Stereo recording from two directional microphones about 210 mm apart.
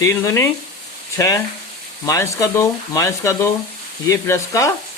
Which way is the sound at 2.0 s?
15° left (ahead or behind).